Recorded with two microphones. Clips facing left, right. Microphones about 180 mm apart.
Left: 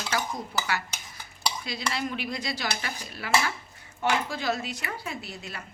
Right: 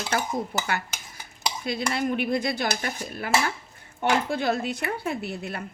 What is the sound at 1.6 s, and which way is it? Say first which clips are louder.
A woman's voice: right 8 dB; 50° right (ahead or behind).